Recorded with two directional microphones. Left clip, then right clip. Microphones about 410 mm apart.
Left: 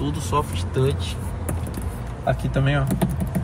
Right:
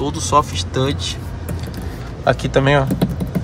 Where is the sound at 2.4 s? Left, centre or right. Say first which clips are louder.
Right 10 dB; centre.